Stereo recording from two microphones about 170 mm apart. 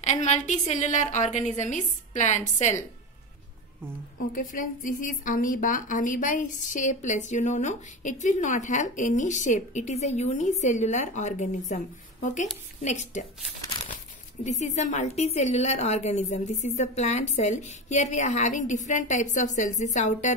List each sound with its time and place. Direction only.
0.0 s a woman's voice: 45° left (ahead or behind)
4.3 s a woman's voice: 50° left (ahead or behind)
14.4 s a woman's voice: 45° left (ahead or behind)